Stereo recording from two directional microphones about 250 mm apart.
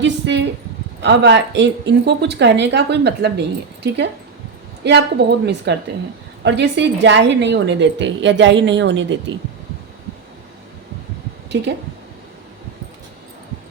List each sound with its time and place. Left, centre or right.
0.0 s a sound: right
1.0 s a woman's voice: right
4.8 s a woman's voice: right